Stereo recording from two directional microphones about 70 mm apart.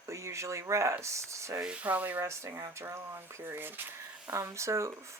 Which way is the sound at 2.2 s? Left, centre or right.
Right.